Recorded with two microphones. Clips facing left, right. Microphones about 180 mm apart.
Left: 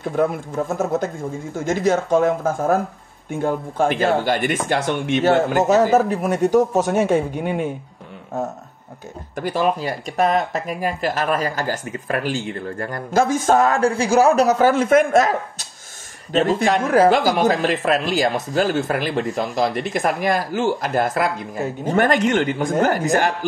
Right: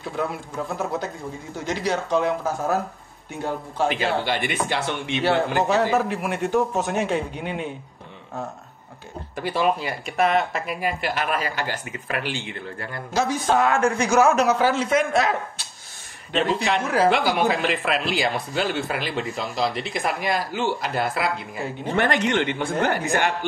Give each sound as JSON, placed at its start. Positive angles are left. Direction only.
{"t": 0.0, "sound": "speech", "side_deg": 50}
{"t": 9.4, "sound": "speech", "side_deg": 45}